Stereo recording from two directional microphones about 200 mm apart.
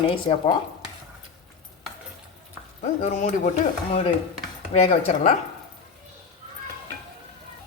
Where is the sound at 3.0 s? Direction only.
40° left (ahead or behind).